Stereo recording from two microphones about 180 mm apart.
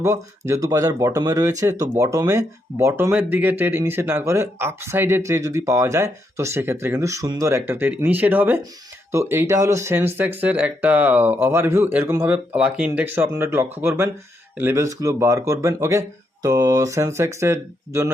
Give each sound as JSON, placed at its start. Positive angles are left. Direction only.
{"t": 0.0, "sound": "speech", "side_deg": -15}